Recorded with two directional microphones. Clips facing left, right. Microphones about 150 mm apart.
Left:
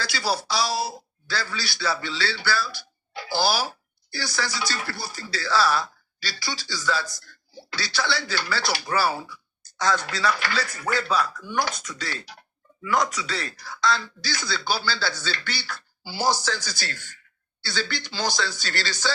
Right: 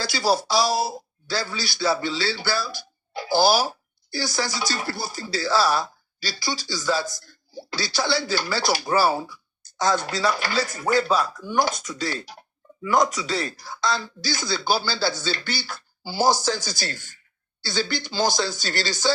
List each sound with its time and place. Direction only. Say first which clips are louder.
0.1 s speech: right 7 dB; 45° right (ahead or behind)